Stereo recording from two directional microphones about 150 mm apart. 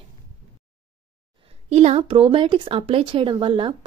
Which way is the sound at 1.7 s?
45° right (ahead or behind).